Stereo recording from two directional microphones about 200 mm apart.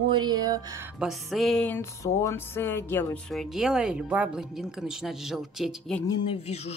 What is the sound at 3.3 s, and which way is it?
Speech, centre (ahead or behind).